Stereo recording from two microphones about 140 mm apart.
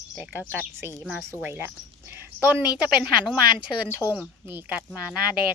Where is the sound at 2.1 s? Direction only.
15° right (ahead or behind).